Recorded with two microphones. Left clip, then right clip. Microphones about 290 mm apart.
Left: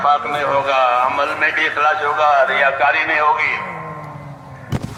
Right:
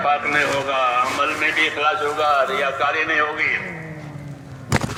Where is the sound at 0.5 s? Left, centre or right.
Left.